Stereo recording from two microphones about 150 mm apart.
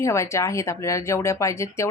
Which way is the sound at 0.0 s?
20° left (ahead or behind).